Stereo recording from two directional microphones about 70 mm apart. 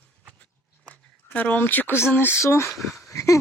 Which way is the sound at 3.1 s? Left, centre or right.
Left.